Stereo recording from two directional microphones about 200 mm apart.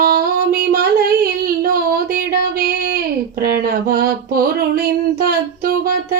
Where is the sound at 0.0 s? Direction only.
50° right (ahead or behind).